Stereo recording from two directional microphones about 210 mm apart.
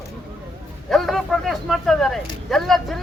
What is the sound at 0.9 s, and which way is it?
Speech, centre (ahead or behind).